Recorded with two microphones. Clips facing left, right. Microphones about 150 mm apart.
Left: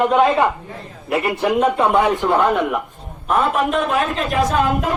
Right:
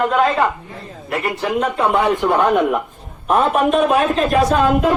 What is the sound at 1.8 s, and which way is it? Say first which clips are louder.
Speech: even; 10° right (ahead or behind).